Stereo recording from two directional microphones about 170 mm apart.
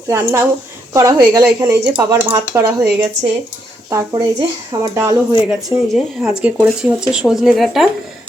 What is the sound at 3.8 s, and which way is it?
Speech, 20° right (ahead or behind).